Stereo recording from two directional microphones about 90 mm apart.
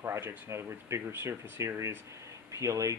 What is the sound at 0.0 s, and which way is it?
Speech, 25° right (ahead or behind).